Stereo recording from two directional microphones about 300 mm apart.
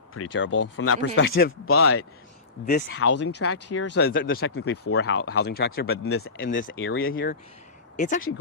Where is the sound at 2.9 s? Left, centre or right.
Left.